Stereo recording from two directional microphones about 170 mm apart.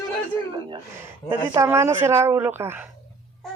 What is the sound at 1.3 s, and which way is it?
Speech, 15° right (ahead or behind).